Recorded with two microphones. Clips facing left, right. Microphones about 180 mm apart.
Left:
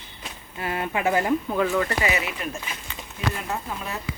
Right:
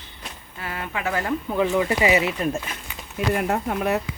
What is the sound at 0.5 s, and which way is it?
Speech, 25° left (ahead or behind).